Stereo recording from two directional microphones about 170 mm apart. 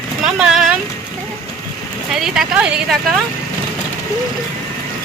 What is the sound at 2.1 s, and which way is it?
Speech, centre (ahead or behind).